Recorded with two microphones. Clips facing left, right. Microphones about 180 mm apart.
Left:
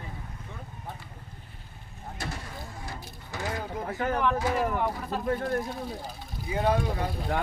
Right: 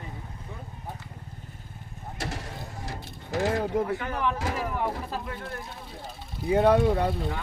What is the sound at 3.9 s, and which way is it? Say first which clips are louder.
Speech: left 3 dB; 40° left (ahead or behind).